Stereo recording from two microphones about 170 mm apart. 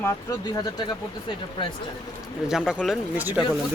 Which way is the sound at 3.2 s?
10° right (ahead or behind).